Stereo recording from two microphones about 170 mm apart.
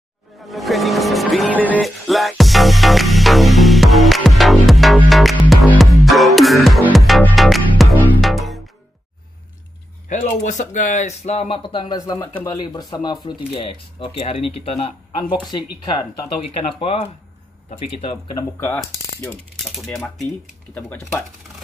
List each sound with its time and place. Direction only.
0.4 s music: centre (ahead or behind)
10.0 s speech: 45° left (ahead or behind)
18.6 s mechanisms: 10° left (ahead or behind)